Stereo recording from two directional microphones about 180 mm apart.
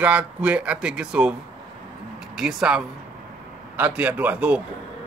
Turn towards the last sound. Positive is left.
turn(degrees=-5)  # may be behind; listen again after turning